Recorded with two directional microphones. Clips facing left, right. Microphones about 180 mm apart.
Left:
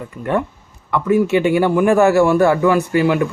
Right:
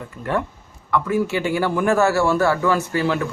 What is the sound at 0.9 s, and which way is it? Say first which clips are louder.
A man's voice: left 5 dB; 20° left (ahead or behind).